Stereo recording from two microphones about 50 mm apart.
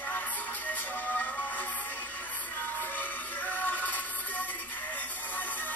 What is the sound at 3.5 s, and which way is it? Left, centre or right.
Music, left.